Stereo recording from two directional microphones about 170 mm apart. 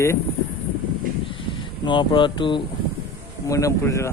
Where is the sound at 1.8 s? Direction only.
30° left (ahead or behind).